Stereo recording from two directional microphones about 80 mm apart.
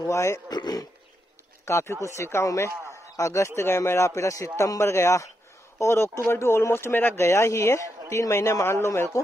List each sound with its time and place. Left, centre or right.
0.0 s a man's voice: left
0.5 s speech: left
1.7 s a man's voice: left